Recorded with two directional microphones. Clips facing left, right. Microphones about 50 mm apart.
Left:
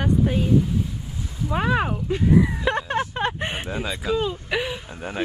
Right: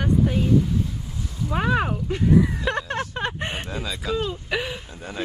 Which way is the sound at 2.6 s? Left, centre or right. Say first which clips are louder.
Left 2 dB; centre.